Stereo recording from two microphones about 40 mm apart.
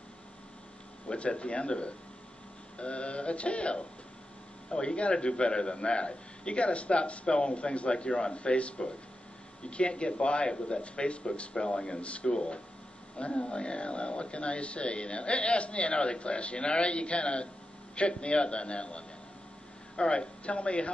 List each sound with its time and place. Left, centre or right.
1.0 s a man's voice: left
20.1 s a man's voice: left